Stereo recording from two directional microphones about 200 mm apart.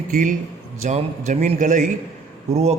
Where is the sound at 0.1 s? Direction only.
40° right (ahead or behind).